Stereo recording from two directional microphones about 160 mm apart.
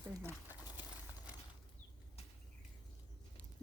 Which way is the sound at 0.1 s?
15° right (ahead or behind).